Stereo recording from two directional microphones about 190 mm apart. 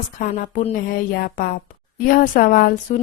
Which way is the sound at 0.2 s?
45° left (ahead or behind).